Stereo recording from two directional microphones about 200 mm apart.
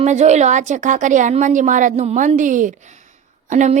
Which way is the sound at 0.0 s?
35° right (ahead or behind).